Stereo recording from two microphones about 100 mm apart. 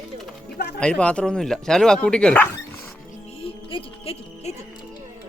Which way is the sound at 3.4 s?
65° left (ahead or behind).